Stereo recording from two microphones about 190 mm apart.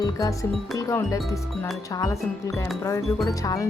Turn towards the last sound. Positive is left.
turn(degrees=15)  # may be behind; listen again after turning